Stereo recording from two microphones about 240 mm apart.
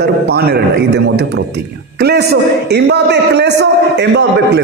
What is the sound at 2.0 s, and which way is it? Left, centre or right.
A man's voice, right.